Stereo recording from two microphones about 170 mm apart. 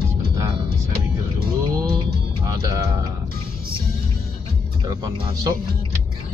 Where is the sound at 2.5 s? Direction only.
20° right (ahead or behind).